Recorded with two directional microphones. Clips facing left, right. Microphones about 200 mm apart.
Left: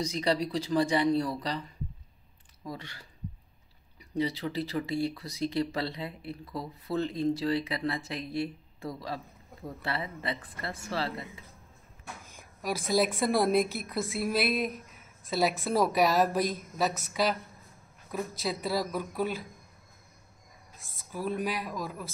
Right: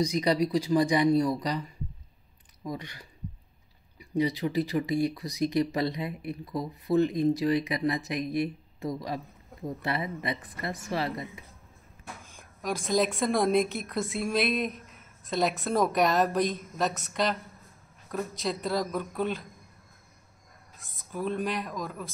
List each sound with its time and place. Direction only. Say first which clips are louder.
0.0 s speech: right 4 dB; 15° right (ahead or behind)
4.2 s speech: right 4 dB; 15° right (ahead or behind)
12.4 s a woman's voice: right 1 dB; 5° left (ahead or behind)
21.1 s speech: right 1 dB; 5° left (ahead or behind)